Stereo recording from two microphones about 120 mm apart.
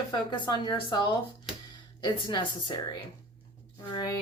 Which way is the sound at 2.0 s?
40° left (ahead or behind).